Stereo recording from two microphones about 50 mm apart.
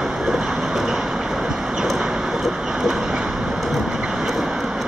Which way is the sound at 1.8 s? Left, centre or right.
Centre.